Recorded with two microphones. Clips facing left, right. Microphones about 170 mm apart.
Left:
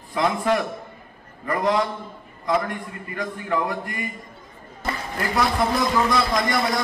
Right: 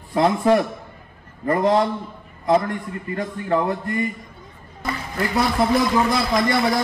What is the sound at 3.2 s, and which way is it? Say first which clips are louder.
Speech: right 3 dB; 30° right (ahead or behind).